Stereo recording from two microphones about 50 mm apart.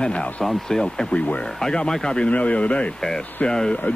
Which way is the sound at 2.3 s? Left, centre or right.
Left.